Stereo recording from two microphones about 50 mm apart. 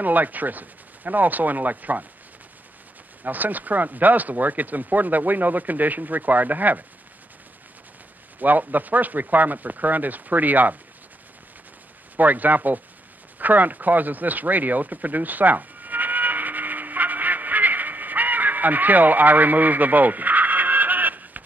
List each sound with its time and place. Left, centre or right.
0.0 s speech: right
3.3 s speech: right
8.4 s speech: right
12.2 s speech: right
13.4 s a sound: right